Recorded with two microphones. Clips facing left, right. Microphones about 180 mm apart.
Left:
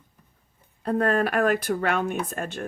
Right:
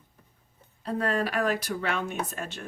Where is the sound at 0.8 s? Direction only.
55° left (ahead or behind).